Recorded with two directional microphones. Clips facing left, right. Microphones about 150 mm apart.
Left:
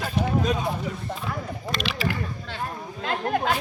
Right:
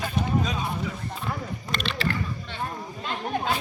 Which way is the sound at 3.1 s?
85° left.